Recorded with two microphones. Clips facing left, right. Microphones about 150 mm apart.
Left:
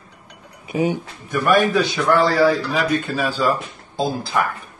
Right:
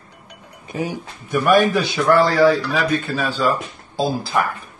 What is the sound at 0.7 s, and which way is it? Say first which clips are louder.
Speech: left 5 dB; 15° left (ahead or behind).